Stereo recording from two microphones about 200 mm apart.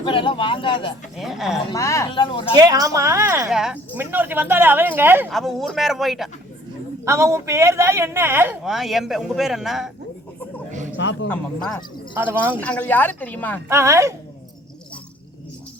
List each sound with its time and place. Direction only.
0.0 s speech: 25° left (ahead or behind)
1.1 s speech: centre (ahead or behind)
1.7 s speech: 15° left (ahead or behind)
2.6 s a man's voice: 20° right (ahead or behind)
3.5 s a man's voice: 5° right (ahead or behind)
7.0 s a man's voice: 15° right (ahead or behind)
10.7 s a sound: 40° right (ahead or behind)
10.9 s a man's voice: 65° left (ahead or behind)
11.3 s speech: 5° left (ahead or behind)
12.1 s a man's voice: 10° right (ahead or behind)
12.5 s speech: 5° left (ahead or behind)
13.7 s a man's voice: 15° right (ahead or behind)